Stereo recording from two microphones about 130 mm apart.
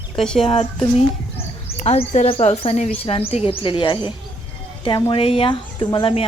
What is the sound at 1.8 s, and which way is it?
Speech, 60° left (ahead or behind).